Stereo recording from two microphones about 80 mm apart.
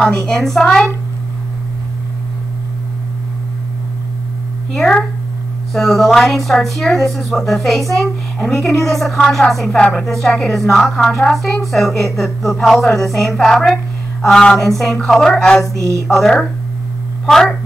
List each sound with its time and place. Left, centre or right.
0.0 s a woman's voice: centre
0.4 s a woman's voice: centre
4.7 s a woman's voice: centre